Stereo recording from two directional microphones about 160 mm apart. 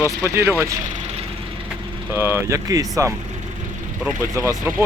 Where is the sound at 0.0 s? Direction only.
20° right (ahead or behind).